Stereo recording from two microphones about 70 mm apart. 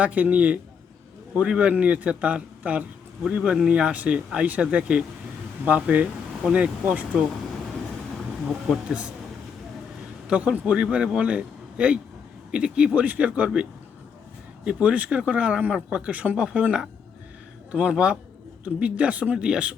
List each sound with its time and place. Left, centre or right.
0.0 s a man's voice: right
8.9 s speech: centre
10.2 s a man's voice: centre